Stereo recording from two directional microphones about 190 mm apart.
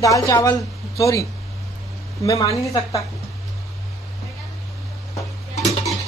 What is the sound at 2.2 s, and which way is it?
Speech, 15° left (ahead or behind).